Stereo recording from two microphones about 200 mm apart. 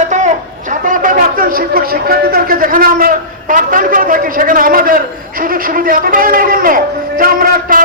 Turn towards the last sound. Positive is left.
turn(degrees=-45)  # may be behind; listen again after turning